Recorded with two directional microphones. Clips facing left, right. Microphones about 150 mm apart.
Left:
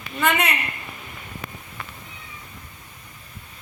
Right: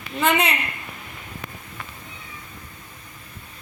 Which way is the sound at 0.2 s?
25° right (ahead or behind).